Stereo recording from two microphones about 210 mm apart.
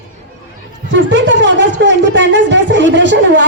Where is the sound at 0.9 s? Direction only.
60° right (ahead or behind).